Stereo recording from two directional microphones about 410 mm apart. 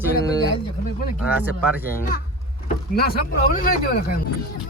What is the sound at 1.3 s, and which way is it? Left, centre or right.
Speech, centre.